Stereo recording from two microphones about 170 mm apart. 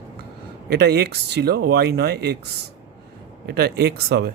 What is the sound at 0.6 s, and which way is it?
Speech, 70° right (ahead or behind).